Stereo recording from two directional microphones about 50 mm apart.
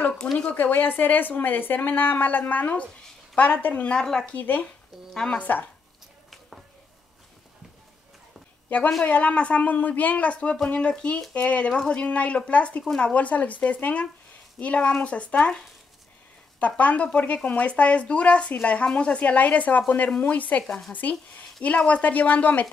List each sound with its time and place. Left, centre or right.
0.2 s a woman's voice: left
0.6 s a woman's voice: left
3.9 s speech: centre
4.3 s a woman's voice: left
5.1 s speech: centre
5.4 s a woman's voice: left
8.6 s a woman's voice: left